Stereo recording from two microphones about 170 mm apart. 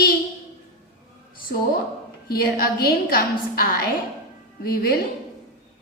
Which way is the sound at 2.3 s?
65° left (ahead or behind).